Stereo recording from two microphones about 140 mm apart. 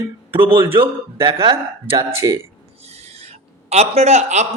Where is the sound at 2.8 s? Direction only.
50° right (ahead or behind).